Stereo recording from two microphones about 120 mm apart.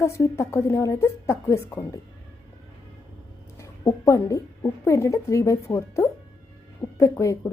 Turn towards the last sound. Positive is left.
turn(degrees=25)  # may be behind; listen again after turning